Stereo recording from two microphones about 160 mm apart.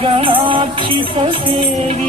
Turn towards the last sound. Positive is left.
turn(degrees=-35)  # may be behind; listen again after turning